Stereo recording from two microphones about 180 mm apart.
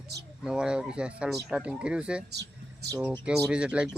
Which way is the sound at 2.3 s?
70° right (ahead or behind).